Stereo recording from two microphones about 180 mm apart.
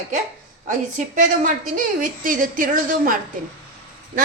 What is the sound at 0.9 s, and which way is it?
A woman's voice, 45° right (ahead or behind).